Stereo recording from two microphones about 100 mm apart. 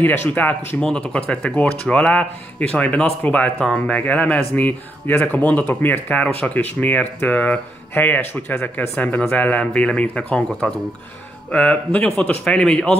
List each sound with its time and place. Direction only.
0.0 s speech: 15° left (ahead or behind)